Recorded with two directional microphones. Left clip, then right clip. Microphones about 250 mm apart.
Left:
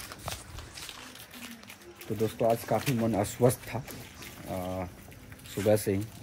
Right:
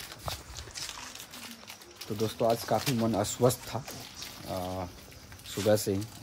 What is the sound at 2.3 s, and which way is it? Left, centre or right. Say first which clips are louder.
Speech: even; right.